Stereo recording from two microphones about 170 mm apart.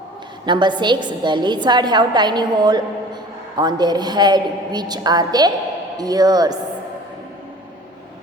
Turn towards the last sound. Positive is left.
turn(degrees=-20)  # may be behind; listen again after turning